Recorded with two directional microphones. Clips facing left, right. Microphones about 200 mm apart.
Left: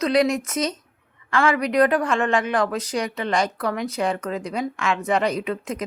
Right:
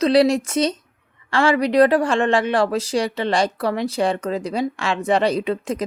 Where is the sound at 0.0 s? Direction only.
30° right (ahead or behind).